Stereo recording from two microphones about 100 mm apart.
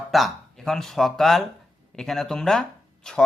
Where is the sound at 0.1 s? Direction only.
Centre (ahead or behind).